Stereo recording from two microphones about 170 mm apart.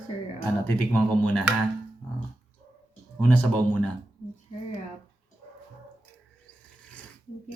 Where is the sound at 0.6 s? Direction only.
10° left (ahead or behind).